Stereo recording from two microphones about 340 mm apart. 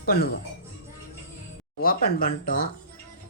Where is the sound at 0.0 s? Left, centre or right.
Left.